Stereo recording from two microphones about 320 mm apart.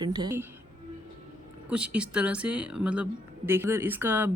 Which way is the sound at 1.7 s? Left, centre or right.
Centre.